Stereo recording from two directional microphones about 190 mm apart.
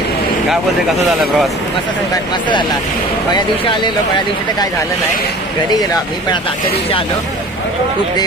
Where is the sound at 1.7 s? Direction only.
25° left (ahead or behind).